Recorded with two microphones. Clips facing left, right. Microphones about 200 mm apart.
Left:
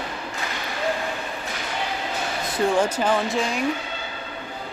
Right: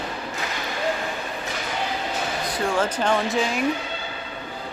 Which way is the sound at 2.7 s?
10° left (ahead or behind).